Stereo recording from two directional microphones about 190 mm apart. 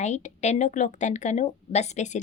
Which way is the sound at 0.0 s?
35° left (ahead or behind).